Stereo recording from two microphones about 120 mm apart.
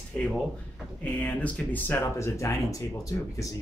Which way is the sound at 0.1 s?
5° left (ahead or behind).